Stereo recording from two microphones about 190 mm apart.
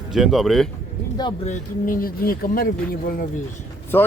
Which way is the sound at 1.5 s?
45° left (ahead or behind).